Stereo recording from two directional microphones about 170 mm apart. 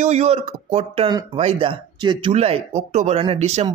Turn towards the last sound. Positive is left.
turn(degrees=-40)  # may be behind; listen again after turning